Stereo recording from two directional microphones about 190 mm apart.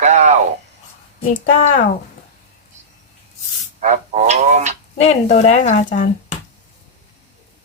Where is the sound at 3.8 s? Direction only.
40° right (ahead or behind).